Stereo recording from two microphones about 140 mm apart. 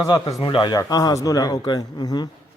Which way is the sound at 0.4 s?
35° left (ahead or behind).